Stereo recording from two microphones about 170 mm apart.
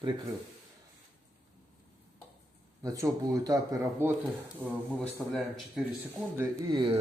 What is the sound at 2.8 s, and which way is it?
A man's voice, 20° right (ahead or behind).